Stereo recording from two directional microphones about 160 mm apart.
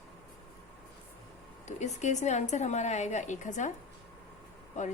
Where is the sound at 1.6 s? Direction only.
45° left (ahead or behind).